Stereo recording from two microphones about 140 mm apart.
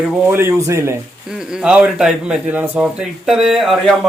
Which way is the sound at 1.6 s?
5° right (ahead or behind).